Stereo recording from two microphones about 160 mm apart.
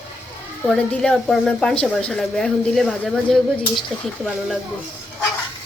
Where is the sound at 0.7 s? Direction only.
5° left (ahead or behind).